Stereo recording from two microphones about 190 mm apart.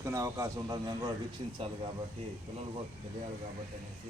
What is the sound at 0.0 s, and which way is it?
Speech, 15° right (ahead or behind).